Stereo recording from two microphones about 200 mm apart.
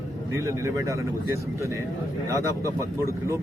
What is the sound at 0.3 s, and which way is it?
A man's voice, 15° right (ahead or behind).